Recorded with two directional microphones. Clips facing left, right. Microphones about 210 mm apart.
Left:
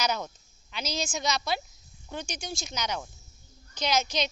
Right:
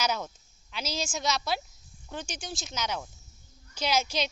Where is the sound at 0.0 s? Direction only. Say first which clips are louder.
Even; 5° right (ahead or behind).